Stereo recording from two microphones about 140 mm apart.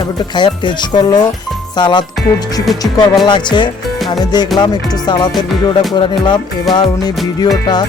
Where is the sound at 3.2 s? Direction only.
35° left (ahead or behind).